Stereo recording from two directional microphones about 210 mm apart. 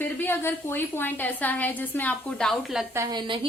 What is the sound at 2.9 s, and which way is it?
Speech, 20° right (ahead or behind).